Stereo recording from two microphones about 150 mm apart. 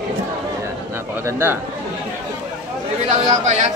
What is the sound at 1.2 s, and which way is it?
Speech, 15° right (ahead or behind).